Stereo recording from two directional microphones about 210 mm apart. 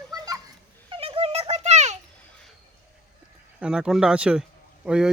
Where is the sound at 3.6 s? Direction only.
5° right (ahead or behind).